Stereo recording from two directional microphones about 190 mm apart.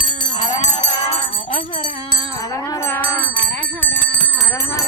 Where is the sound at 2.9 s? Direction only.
10° left (ahead or behind).